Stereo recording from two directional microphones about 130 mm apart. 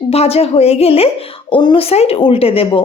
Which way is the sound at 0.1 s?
50° left (ahead or behind).